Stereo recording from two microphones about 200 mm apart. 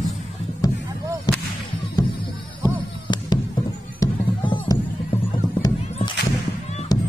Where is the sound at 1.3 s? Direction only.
20° left (ahead or behind).